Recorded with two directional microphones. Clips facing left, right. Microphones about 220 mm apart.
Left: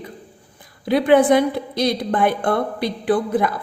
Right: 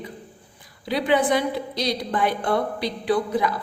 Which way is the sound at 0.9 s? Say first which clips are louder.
Left 7 dB; 50° left (ahead or behind).